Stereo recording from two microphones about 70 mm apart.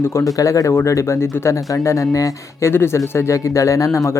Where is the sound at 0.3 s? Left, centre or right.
Left.